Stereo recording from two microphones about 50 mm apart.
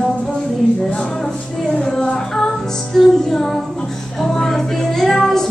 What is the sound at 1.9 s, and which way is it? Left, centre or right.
Music, centre.